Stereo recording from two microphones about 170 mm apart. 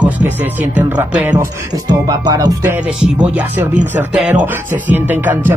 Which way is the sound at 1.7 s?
20° right (ahead or behind).